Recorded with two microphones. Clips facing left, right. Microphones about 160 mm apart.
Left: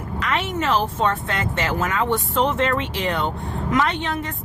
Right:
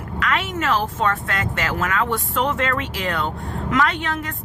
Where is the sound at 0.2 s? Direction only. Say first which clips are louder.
Even; 25° left (ahead or behind).